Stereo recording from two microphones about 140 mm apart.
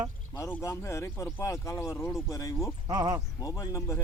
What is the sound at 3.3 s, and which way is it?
Speech, 25° left (ahead or behind).